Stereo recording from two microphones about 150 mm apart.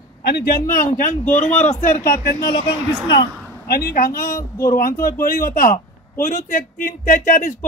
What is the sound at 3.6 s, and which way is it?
A man's voice, 90° left.